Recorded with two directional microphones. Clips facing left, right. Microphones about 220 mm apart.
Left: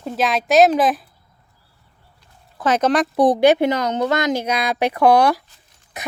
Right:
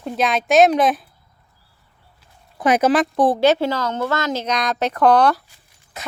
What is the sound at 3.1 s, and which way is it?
Speech, 15° left (ahead or behind).